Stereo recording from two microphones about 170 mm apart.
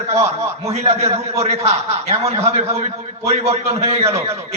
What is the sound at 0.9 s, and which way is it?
A man's voice, 35° right (ahead or behind).